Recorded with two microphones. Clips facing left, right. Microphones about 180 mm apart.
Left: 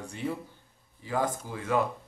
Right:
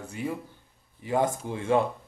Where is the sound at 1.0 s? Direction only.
25° right (ahead or behind).